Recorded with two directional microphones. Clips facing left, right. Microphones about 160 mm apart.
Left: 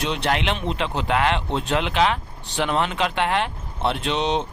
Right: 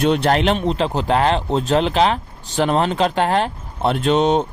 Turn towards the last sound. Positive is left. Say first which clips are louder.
# right 7 dB
turn(degrees=-50)  # may be behind; listen again after turning